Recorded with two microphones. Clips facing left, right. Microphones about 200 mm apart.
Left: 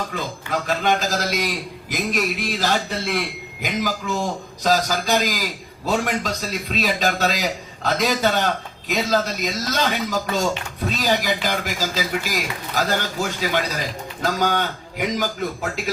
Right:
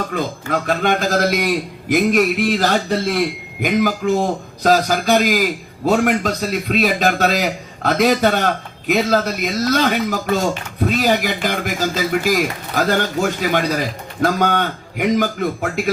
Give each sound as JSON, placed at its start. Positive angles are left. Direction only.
{"t": 0.1, "sound": "a man's voice", "side_deg": -55}